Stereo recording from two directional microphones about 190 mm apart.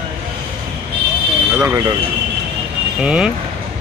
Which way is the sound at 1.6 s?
15° right (ahead or behind).